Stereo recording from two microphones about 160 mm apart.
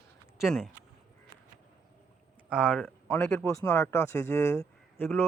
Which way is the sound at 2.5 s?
5° right (ahead or behind).